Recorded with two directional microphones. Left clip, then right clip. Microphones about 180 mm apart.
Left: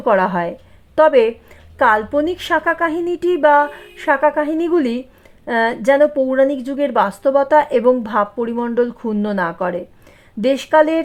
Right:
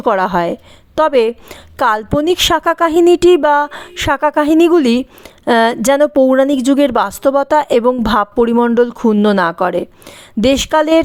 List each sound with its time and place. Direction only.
0.0 s a woman's voice: 35° right (ahead or behind)